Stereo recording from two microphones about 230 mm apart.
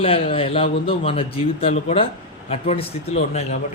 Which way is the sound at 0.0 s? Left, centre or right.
Left.